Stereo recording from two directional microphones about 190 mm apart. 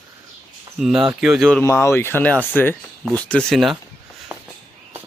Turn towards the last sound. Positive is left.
turn(degrees=0)  # may be behind; listen again after turning